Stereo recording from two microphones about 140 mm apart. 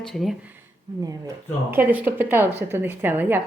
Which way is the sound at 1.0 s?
25° right (ahead or behind).